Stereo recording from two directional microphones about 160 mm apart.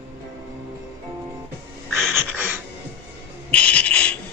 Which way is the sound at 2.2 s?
15° right (ahead or behind).